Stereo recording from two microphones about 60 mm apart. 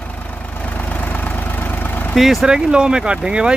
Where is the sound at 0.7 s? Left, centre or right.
Left.